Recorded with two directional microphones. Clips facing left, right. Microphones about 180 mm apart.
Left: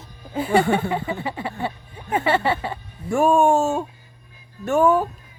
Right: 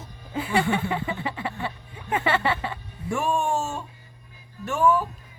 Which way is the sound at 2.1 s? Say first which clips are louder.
Left 4 dB; 40° left (ahead or behind).